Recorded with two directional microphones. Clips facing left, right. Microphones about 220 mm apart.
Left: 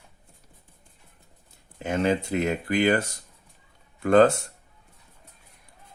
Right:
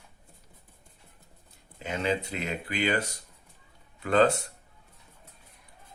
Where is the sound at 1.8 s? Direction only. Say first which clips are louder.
Left 5 dB; 50° left (ahead or behind).